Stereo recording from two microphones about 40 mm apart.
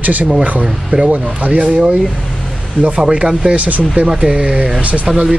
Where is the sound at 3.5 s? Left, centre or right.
Right.